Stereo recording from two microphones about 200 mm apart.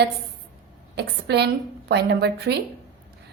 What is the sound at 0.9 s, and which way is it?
A woman's voice, 55° right (ahead or behind).